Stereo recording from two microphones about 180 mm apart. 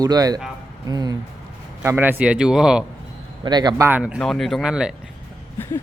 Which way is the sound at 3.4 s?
25° right (ahead or behind).